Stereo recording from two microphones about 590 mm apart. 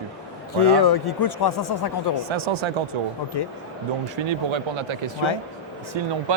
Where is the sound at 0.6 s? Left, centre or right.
Left.